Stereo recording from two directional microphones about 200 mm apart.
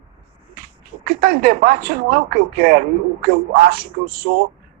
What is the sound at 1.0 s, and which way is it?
Speech, 45° right (ahead or behind).